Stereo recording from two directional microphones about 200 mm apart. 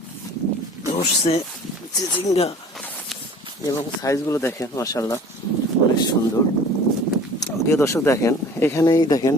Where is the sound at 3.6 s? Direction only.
15° left (ahead or behind).